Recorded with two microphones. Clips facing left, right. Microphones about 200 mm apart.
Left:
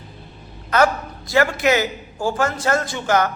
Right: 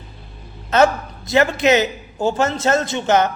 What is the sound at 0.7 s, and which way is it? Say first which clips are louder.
A man's voice: right 3 dB; 25° right (ahead or behind).